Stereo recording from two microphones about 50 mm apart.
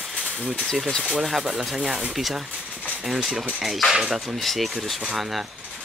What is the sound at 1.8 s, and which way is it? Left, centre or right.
Speech, centre.